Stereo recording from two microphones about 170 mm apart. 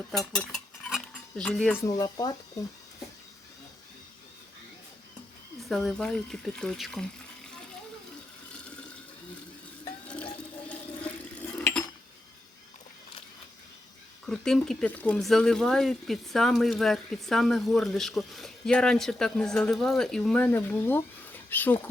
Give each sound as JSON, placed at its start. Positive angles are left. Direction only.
{"t": 0.1, "sound": "dishes", "side_deg": 0}
{"t": 2.0, "sound": "speech", "side_deg": 20}
{"t": 5.6, "sound": "speech", "side_deg": 0}
{"t": 10.7, "sound": "water", "side_deg": 10}
{"t": 14.3, "sound": "speech", "side_deg": 5}